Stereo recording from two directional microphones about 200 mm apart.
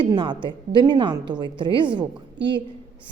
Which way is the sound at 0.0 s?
25° right (ahead or behind).